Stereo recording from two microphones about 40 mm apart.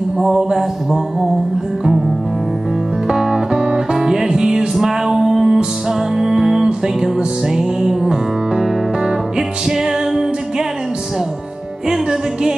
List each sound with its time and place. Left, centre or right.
0.2 s a sound: centre
1.9 s music: centre
11.9 s music: centre